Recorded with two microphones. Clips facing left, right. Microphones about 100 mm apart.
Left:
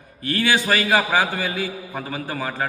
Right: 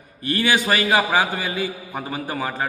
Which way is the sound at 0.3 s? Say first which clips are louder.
Even; 15° right (ahead or behind).